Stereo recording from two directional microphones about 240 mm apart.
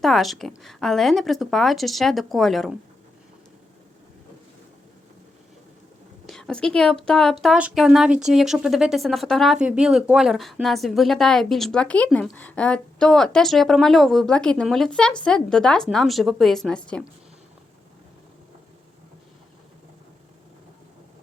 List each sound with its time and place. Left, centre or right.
0.0 s speech: centre
6.2 s a woman's voice: centre